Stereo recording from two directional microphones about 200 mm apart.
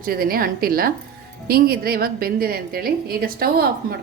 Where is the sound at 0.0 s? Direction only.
45° right (ahead or behind).